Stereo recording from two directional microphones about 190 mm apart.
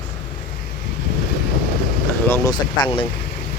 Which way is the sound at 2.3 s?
10° left (ahead or behind).